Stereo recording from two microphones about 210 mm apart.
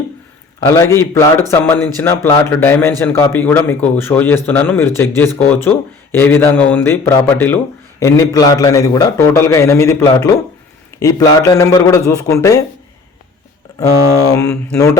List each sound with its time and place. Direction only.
0.8 s speech: 15° left (ahead or behind)
14.3 s speech: 15° left (ahead or behind)